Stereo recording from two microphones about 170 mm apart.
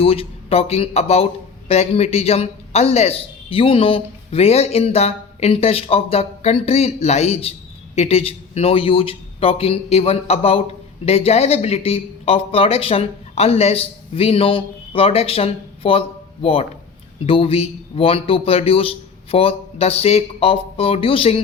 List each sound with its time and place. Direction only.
0.0 s speech: 35° left (ahead or behind)